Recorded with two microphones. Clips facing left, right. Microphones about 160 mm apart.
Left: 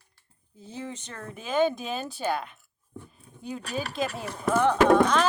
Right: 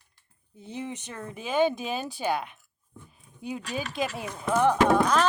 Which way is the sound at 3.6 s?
35° left (ahead or behind).